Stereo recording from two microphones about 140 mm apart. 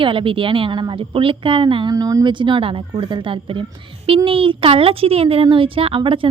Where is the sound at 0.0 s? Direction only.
40° right (ahead or behind).